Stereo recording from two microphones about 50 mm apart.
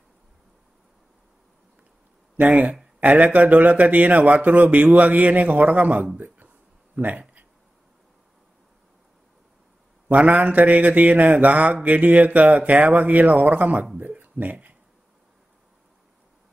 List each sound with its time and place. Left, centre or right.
2.3 s speech: right
3.0 s mantra: right
6.1 s a sound: right
7.0 s speech: right
10.0 s mantra: right
13.9 s speech: right